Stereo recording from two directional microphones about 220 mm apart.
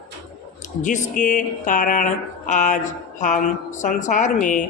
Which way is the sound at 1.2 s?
35° left (ahead or behind).